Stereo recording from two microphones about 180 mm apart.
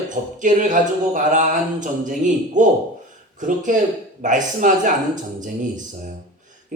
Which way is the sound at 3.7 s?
45° right (ahead or behind).